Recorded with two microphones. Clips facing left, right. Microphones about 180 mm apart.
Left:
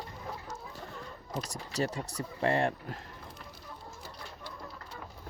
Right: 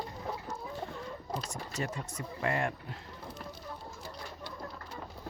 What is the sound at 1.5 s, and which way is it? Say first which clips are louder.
Speech: left 4 dB; 35° left (ahead or behind).